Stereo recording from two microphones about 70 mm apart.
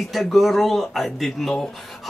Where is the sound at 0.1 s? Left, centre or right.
Centre.